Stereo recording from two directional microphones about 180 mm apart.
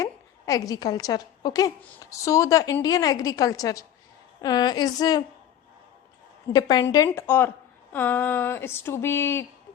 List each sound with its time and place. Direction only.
0.0 s a woman's voice: 20° left (ahead or behind)
6.5 s a woman's voice: 20° left (ahead or behind)